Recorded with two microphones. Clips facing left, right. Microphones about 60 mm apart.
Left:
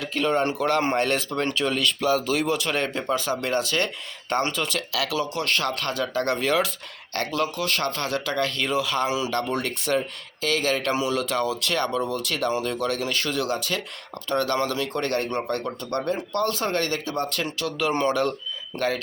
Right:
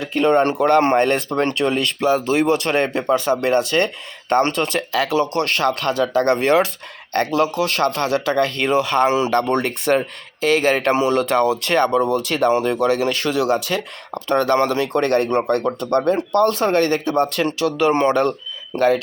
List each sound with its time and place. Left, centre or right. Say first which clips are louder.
0.3 s speech: right 8 dB; right
0.9 s speech: right 7 dB; right
2.0 s speech: right 8 dB; right
2.5 s speech: right 7 dB; right
5.6 s speech: right 8 dB; right
12.8 s speech: right 8 dB; right
13.7 s speech: right 6 dB; right
17.3 s speech: right 8 dB; right
17.9 s speech: right 6 dB; right
18.7 s speech: right 9 dB; right